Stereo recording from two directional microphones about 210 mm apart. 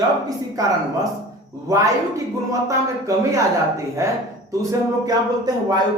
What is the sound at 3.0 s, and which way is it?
Speech, 15° right (ahead or behind).